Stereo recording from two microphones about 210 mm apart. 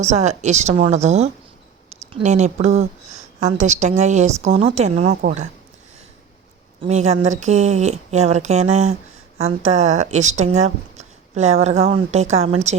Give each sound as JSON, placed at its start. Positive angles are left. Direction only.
{"t": 0.0, "sound": "a woman's voice", "side_deg": -30}
{"t": 6.8, "sound": "speech", "side_deg": -30}